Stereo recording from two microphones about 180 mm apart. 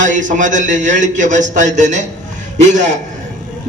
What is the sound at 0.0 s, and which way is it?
A man's voice, 45° right (ahead or behind).